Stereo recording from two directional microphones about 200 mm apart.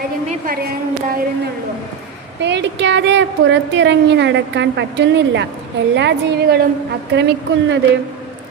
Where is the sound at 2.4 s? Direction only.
60° right (ahead or behind).